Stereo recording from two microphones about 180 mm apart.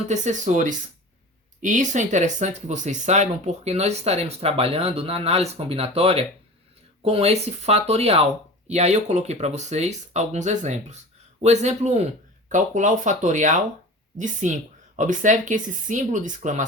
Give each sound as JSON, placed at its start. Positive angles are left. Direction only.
{"t": 0.1, "sound": "speech", "side_deg": -40}